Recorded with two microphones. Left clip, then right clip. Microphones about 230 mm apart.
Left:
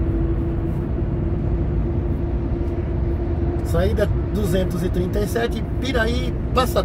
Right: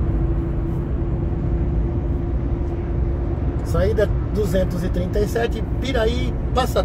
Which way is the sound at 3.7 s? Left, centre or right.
Centre.